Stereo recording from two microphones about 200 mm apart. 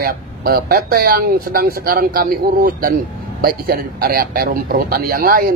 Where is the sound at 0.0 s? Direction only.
50° right (ahead or behind).